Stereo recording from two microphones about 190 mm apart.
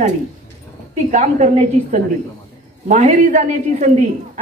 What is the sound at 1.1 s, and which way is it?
A woman's voice, 40° right (ahead or behind).